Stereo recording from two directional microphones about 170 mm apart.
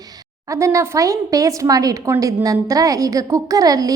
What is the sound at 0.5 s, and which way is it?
A woman's voice, 15° right (ahead or behind).